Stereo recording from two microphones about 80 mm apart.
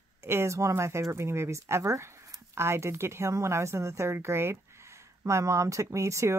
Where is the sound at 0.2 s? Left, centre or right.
Right.